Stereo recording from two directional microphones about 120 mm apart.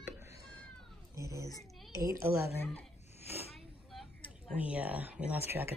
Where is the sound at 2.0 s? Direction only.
25° right (ahead or behind).